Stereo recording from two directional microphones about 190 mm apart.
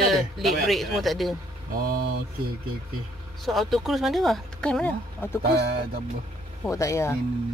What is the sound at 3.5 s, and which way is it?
Speech, centre (ahead or behind).